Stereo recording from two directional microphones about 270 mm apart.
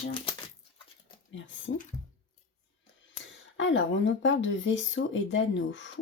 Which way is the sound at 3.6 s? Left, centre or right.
Left.